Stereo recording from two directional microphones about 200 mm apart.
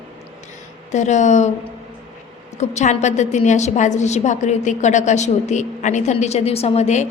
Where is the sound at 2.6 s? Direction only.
35° left (ahead or behind).